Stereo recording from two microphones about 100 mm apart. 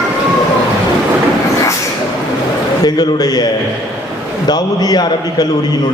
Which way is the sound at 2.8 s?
40° left (ahead or behind).